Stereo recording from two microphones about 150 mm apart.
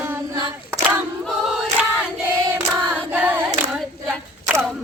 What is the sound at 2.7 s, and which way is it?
Female singing, 10° right (ahead or behind).